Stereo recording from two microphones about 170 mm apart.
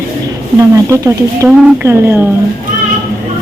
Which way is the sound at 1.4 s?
15° right (ahead or behind).